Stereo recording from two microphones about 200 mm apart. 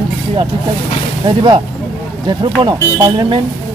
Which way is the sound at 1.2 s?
25° right (ahead or behind).